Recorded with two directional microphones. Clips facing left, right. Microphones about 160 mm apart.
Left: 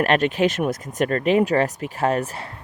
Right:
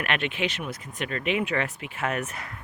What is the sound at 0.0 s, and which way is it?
Speech, 40° left (ahead or behind).